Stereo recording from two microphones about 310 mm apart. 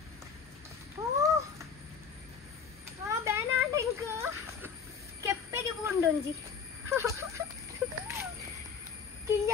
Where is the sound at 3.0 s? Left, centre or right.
Centre.